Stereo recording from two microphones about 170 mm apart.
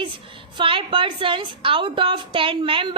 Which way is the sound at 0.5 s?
30° right (ahead or behind).